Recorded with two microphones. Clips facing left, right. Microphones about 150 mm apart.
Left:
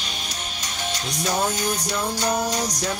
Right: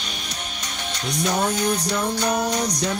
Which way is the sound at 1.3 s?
5° left (ahead or behind).